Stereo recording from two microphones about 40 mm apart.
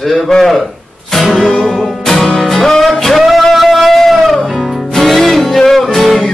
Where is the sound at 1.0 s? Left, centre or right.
Centre.